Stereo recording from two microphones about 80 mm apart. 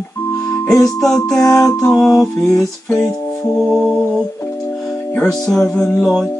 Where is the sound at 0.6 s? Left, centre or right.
Left.